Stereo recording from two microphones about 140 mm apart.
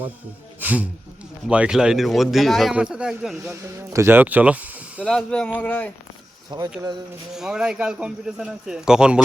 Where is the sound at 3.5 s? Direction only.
20° right (ahead or behind).